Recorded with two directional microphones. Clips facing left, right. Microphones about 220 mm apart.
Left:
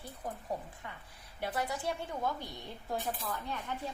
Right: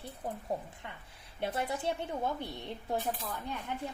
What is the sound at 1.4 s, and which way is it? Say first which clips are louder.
Speech: right 2 dB; 25° right (ahead or behind).